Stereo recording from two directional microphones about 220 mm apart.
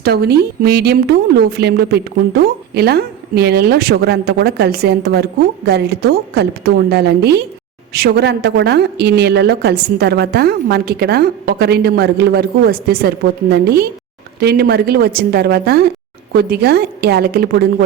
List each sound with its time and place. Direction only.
0.0 s a woman's voice: 45° right (ahead or behind)